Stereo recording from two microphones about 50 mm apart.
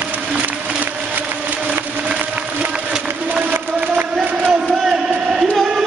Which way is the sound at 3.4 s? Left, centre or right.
Right.